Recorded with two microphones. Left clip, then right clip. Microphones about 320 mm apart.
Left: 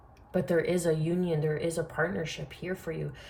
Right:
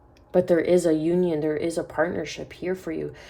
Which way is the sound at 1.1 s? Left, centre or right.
Right.